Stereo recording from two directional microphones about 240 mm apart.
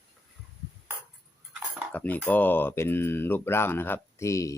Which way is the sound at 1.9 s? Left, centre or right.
Centre.